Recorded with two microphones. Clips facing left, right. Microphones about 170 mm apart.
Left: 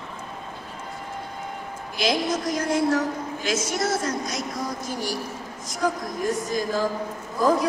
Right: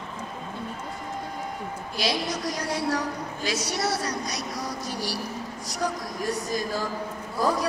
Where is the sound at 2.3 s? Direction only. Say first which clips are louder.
Left 5 dB; 50° left (ahead or behind).